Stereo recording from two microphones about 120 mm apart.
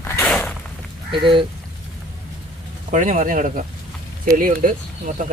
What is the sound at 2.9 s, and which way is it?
Speech, 90° right.